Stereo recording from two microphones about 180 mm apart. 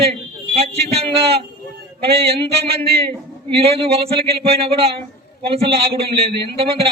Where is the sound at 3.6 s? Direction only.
35° right (ahead or behind).